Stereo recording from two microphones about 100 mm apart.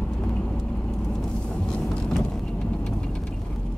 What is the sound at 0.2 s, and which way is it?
Vehicle, 10° left (ahead or behind).